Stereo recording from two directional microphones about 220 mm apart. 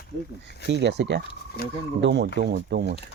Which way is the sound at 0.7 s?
50° right (ahead or behind).